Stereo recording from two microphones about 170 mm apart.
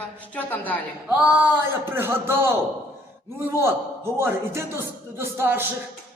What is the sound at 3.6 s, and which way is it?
A man's voice, 15° right (ahead or behind).